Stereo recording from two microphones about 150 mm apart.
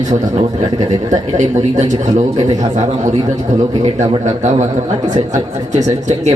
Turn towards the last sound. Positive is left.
turn(degrees=-50)  # may be behind; listen again after turning